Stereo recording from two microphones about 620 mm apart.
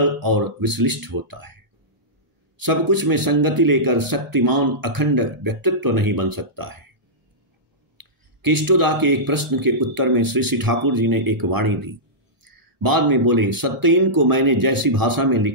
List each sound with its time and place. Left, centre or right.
0.0 s speech: right
8.0 s speech: right